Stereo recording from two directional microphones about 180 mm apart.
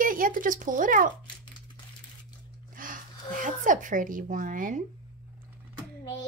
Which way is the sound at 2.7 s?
50° right (ahead or behind).